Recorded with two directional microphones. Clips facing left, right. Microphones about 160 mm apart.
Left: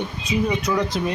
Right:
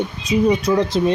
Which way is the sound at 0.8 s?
25° right (ahead or behind).